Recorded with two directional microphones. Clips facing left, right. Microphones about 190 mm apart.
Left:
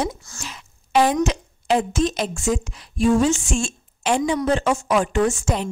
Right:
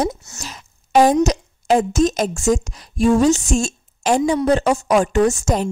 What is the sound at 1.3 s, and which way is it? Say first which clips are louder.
A woman's voice: right 4 dB; 45° right (ahead or behind).